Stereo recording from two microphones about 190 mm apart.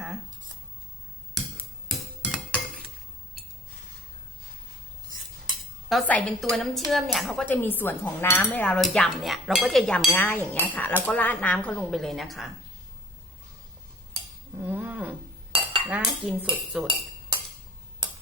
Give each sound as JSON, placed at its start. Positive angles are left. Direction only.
{"t": 1.3, "sound": "chink", "side_deg": 0}
{"t": 5.9, "sound": "speech", "side_deg": 5}
{"t": 14.6, "sound": "a sound", "side_deg": -10}
{"t": 15.5, "sound": "cutlery", "side_deg": -30}
{"t": 15.9, "sound": "speech", "side_deg": 0}